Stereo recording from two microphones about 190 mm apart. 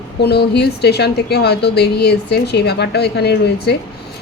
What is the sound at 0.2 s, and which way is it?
A woman's voice, 60° left (ahead or behind).